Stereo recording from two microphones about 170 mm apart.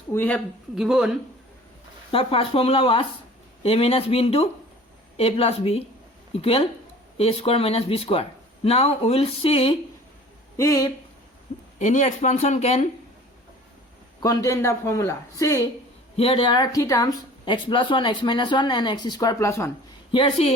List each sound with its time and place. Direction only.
0.1 s speech: 10° left (ahead or behind)
0.8 s speech: 5° right (ahead or behind)
2.1 s speech: 35° left (ahead or behind)
10.6 s speech: 20° left (ahead or behind)
11.8 s speech: 45° left (ahead or behind)
14.2 s speech: 20° left (ahead or behind)
16.1 s speech: 35° left (ahead or behind); by 19.7 s 15° left (ahead or behind)
20.1 s speech: 30° left (ahead or behind)